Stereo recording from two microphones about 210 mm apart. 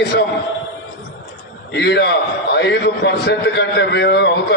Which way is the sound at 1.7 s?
55° left (ahead or behind).